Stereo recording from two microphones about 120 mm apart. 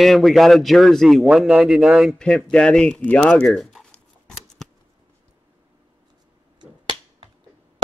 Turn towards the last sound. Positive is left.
turn(degrees=-40)  # may be behind; listen again after turning